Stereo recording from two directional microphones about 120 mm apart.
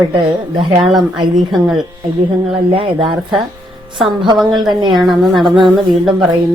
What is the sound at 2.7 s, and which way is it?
Speech, 50° right (ahead or behind).